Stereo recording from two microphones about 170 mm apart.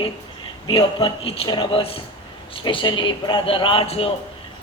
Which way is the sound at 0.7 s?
30° left (ahead or behind).